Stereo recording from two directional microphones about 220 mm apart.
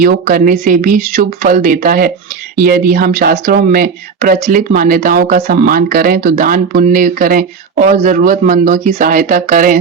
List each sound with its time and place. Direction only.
0.0 s speech: 40° right (ahead or behind)